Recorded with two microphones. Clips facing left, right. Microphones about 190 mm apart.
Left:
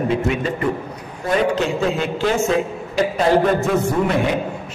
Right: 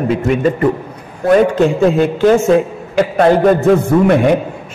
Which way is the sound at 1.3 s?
50° right (ahead or behind).